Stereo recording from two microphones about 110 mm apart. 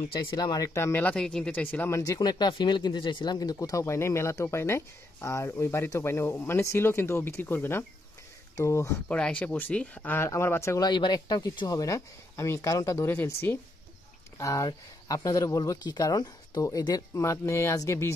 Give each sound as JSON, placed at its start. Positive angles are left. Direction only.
{"t": 0.4, "sound": "speech", "side_deg": 40}
{"t": 0.7, "sound": "speech", "side_deg": 25}
{"t": 1.0, "sound": "speech", "side_deg": 5}
{"t": 2.1, "sound": "speech", "side_deg": 40}
{"t": 9.1, "sound": "speech", "side_deg": 10}
{"t": 10.8, "sound": "speech", "side_deg": 40}
{"t": 14.4, "sound": "speech", "side_deg": 30}